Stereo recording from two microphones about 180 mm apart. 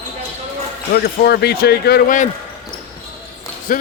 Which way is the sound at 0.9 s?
60° left (ahead or behind).